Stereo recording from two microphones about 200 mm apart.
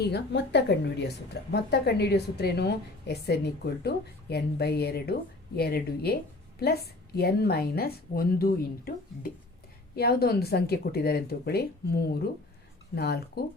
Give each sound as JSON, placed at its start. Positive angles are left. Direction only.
{"t": 0.0, "sound": "a woman's voice", "side_deg": 60}